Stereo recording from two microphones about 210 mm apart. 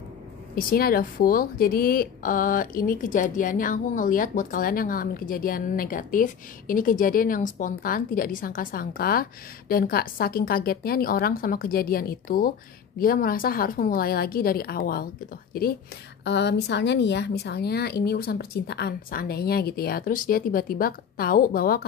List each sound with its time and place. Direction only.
0.6 s a woman's voice: 45° left (ahead or behind)
16.3 s a woman's voice: 55° left (ahead or behind)